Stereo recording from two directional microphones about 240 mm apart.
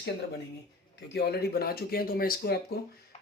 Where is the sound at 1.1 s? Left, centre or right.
Left.